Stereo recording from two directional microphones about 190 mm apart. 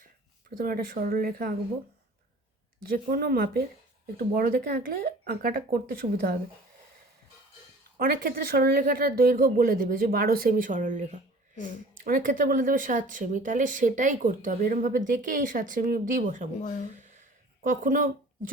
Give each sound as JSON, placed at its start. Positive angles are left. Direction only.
{"t": 0.6, "sound": "speech", "side_deg": -50}
{"t": 2.9, "sound": "speech", "side_deg": -55}
{"t": 7.9, "sound": "speech", "side_deg": -50}
{"t": 17.6, "sound": "speech", "side_deg": -45}